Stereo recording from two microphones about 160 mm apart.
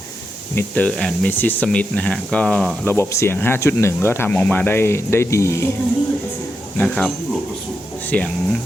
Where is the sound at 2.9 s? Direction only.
15° left (ahead or behind).